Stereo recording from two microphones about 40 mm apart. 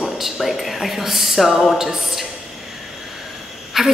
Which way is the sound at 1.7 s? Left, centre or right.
Centre.